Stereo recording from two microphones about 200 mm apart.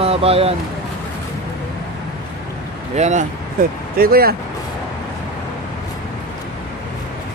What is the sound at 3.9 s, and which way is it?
Speech, 50° right (ahead or behind).